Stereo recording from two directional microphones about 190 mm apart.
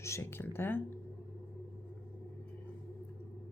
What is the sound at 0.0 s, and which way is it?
Speech, 15° left (ahead or behind).